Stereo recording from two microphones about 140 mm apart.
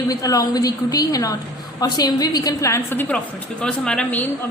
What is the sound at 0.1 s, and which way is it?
A woman's voice, 25° left (ahead or behind).